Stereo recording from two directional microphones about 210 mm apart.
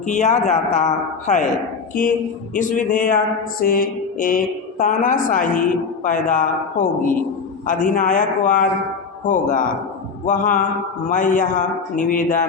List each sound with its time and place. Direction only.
0.1 s speech: 35° left (ahead or behind)
2.6 s speech: 40° left (ahead or behind)